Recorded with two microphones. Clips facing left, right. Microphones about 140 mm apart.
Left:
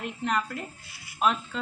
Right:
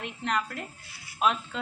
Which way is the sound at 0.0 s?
Centre (ahead or behind).